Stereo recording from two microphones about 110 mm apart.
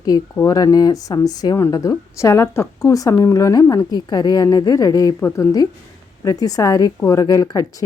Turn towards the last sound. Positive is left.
turn(degrees=35)  # may be behind; listen again after turning